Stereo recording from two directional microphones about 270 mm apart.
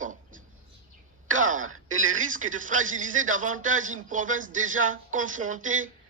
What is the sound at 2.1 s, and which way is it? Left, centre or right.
A man's voice, right.